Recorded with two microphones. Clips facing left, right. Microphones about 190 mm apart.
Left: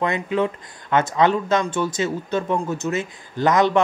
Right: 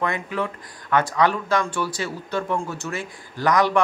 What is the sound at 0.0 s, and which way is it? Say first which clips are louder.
Speech: left 4 dB; 20° left (ahead or behind).